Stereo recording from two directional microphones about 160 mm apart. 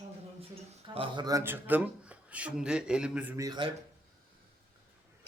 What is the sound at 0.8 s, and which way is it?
Speech, 35° right (ahead or behind).